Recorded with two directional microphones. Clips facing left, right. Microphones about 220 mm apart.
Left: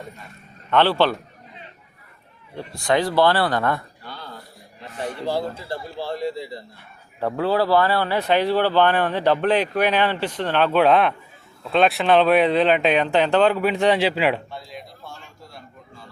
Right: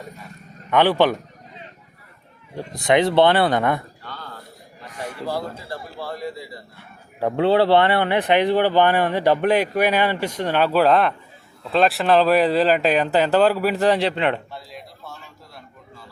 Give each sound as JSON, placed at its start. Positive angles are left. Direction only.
{"t": 0.7, "sound": "speech", "side_deg": -15}
{"t": 2.6, "sound": "speech", "side_deg": -20}
{"t": 4.0, "sound": "a sound", "side_deg": 15}
{"t": 4.9, "sound": "speech", "side_deg": 25}
{"t": 7.3, "sound": "speech", "side_deg": -25}